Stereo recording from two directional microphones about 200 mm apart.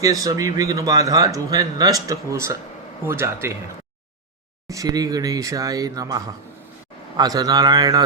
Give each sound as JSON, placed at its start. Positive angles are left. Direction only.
{"t": 0.0, "sound": "speech", "side_deg": -15}
{"t": 4.7, "sound": "speech", "side_deg": -15}